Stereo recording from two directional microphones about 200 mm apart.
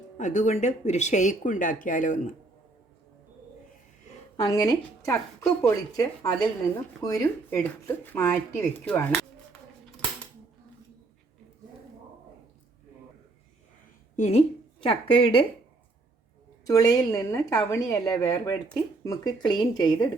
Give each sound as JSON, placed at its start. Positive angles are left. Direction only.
{"t": 0.2, "sound": "speech", "side_deg": 40}
{"t": 4.4, "sound": "a woman's voice", "side_deg": 20}
{"t": 14.2, "sound": "a woman's voice", "side_deg": 35}
{"t": 16.6, "sound": "a woman's voice", "side_deg": 20}